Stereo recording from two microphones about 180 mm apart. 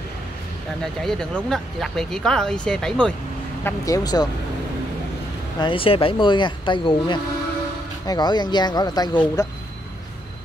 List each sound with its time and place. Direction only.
1.0 s speech: centre (ahead or behind)
3.6 s speech: 20° left (ahead or behind)
5.6 s speech: 30° left (ahead or behind)